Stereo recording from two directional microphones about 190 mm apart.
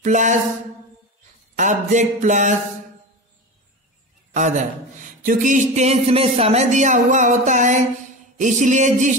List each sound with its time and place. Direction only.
0.0 s speech: 40° right (ahead or behind)
1.6 s speech: 40° right (ahead or behind)
4.3 s a man's voice: 40° right (ahead or behind)